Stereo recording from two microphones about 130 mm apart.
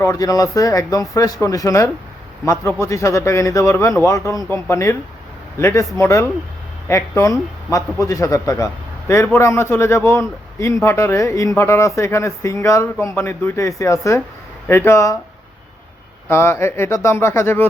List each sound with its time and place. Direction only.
0.0 s a man's voice: 25° left (ahead or behind)
16.3 s a man's voice: 20° left (ahead or behind)